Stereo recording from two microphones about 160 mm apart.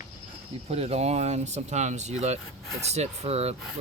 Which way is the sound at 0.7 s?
40° right (ahead or behind).